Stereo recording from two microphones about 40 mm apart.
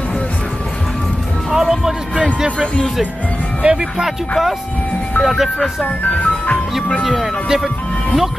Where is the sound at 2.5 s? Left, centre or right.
Left.